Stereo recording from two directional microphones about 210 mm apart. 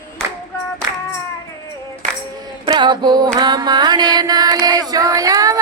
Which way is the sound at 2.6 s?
20° right (ahead or behind).